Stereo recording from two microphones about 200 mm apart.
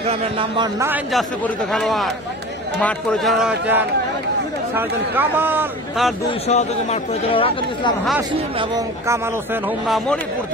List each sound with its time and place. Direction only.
0.1 s speech: 25° right (ahead or behind)
0.7 s speech: 10° right (ahead or behind)
1.1 s speech: centre (ahead or behind)
6.4 s speech: 35° left (ahead or behind)
8.5 s speech: 15° right (ahead or behind); by 10.2 s centre (ahead or behind)